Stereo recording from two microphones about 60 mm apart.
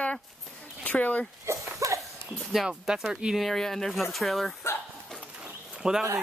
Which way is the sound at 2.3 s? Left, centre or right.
Centre.